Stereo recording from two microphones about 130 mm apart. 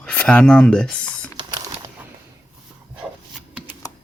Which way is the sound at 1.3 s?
35° right (ahead or behind).